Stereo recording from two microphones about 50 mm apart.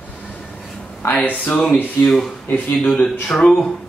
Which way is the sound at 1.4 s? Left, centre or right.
Left.